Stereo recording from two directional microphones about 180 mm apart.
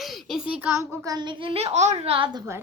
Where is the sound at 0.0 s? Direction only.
Centre (ahead or behind); by 2.4 s 30° right (ahead or behind).